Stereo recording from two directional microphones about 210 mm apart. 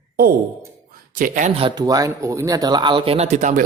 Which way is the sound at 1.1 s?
40° right (ahead or behind).